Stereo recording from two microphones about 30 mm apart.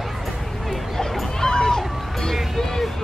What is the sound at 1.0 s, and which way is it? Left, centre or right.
Music, centre.